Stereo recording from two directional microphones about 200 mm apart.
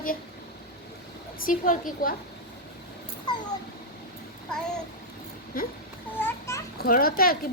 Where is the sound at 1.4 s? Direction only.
45° left (ahead or behind).